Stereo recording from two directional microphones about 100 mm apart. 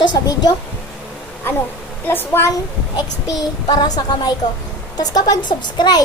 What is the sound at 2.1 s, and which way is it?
Speech, 20° left (ahead or behind).